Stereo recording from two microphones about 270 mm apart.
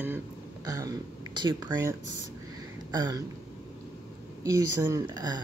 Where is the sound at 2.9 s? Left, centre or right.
Centre.